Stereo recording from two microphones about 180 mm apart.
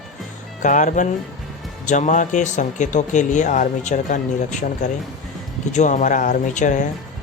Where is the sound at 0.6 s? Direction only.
45° left (ahead or behind).